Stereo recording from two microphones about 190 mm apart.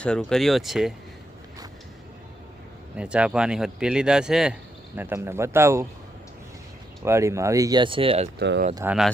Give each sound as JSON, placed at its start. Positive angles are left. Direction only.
{"t": 0.0, "sound": "speech", "side_deg": 5}
{"t": 3.0, "sound": "speech", "side_deg": -5}
{"t": 7.0, "sound": "speech", "side_deg": -15}
{"t": 8.4, "sound": "speech", "side_deg": -60}
{"t": 8.7, "sound": "speech", "side_deg": -10}